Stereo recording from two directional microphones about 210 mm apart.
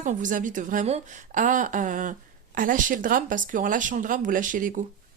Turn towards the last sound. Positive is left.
turn(degrees=-40)  # may be behind; listen again after turning